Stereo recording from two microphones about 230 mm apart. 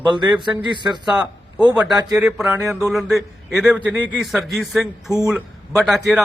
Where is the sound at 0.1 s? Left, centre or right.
Centre.